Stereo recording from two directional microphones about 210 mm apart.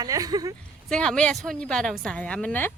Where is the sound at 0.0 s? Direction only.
20° right (ahead or behind).